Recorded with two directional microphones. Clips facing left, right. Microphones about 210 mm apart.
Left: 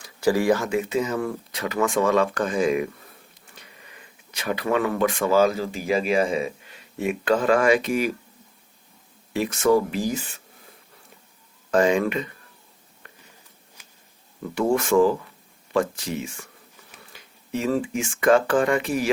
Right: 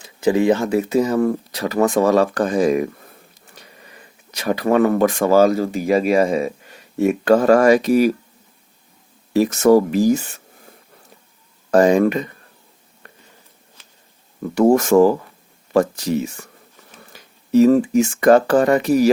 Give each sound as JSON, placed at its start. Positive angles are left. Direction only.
{"t": 0.0, "sound": "speech", "side_deg": -20}
{"t": 0.7, "sound": "speech", "side_deg": -40}
{"t": 9.3, "sound": "speech", "side_deg": -40}
{"t": 11.7, "sound": "speech", "side_deg": -40}
{"t": 14.5, "sound": "speech", "side_deg": -40}